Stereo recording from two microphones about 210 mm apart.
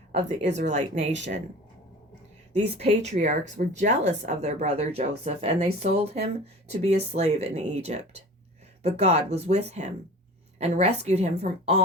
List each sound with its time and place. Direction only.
0.1 s speech: 35° right (ahead or behind)
2.6 s speech: 35° right (ahead or behind)